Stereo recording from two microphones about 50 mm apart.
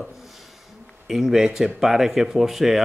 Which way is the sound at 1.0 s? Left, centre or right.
Centre.